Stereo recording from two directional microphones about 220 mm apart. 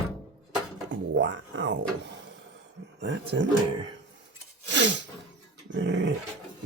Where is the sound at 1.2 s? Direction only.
55° right (ahead or behind).